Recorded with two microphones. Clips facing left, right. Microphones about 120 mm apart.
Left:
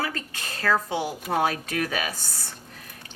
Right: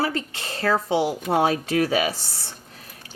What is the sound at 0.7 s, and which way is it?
Speech, 15° right (ahead or behind).